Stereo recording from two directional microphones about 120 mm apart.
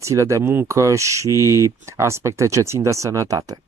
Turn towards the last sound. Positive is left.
turn(degrees=-25)  # may be behind; listen again after turning